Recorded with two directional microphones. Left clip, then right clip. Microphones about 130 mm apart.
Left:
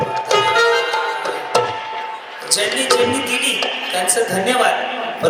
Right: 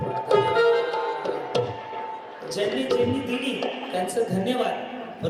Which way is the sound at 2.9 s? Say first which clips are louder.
Left 9 dB; 15° left (ahead or behind).